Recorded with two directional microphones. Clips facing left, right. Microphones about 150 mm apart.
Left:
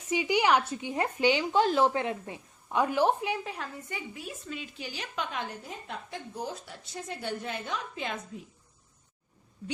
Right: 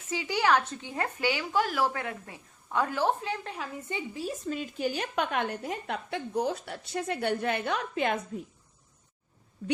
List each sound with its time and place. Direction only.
0.1 s speech: 15° left (ahead or behind)
3.8 s a woman's voice: 25° right (ahead or behind); by 8.2 s 60° right (ahead or behind)